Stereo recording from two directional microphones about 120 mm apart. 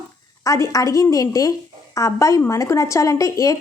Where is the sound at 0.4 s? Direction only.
25° left (ahead or behind).